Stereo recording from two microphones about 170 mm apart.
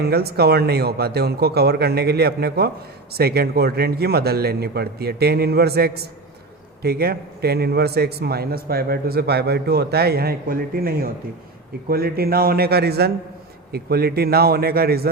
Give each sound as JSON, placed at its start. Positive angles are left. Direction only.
{"t": 0.0, "sound": "a man's voice", "side_deg": -70}